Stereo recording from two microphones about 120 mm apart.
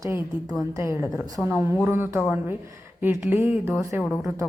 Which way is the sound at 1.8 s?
20° right (ahead or behind).